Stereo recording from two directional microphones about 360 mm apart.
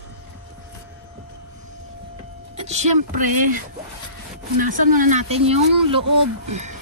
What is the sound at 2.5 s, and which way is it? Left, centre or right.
Music, centre.